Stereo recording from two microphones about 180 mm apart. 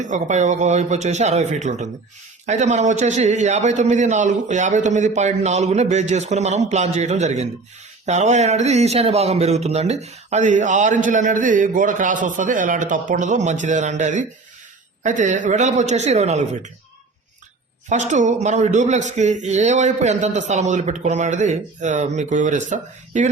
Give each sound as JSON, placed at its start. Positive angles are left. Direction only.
{"t": 0.0, "sound": "speech", "side_deg": -40}
{"t": 17.8, "sound": "speech", "side_deg": -45}